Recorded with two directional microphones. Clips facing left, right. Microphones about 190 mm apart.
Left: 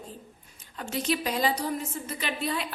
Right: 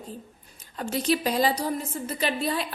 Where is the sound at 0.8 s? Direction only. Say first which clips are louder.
Right 4 dB; 35° right (ahead or behind).